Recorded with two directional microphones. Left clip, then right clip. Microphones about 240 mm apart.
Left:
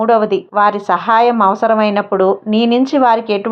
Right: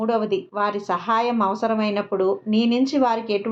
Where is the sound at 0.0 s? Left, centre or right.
Left.